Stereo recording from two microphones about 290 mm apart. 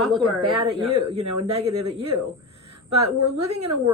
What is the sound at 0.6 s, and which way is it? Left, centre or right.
Speech, centre.